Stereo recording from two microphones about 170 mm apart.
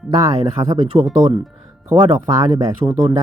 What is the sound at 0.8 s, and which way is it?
Speech, 35° right (ahead or behind).